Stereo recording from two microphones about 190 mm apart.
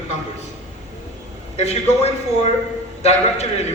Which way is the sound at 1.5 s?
35° left (ahead or behind).